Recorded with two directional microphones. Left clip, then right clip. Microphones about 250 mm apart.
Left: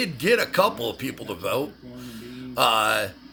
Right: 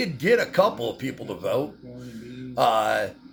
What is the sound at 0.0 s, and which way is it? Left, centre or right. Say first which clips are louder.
Speech: even; left.